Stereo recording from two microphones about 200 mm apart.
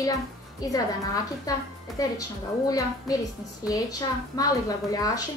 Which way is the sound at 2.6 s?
15° left (ahead or behind).